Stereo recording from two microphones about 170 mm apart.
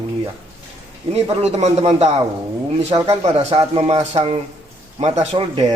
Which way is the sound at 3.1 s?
40° right (ahead or behind).